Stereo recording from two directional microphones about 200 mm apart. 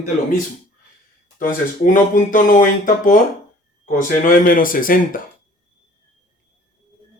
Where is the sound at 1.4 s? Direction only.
40° left (ahead or behind).